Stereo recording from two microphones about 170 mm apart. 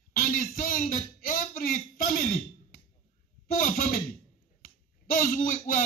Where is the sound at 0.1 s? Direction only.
55° left (ahead or behind).